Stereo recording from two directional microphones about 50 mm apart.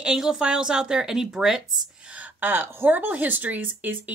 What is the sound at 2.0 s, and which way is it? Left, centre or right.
Speech, right.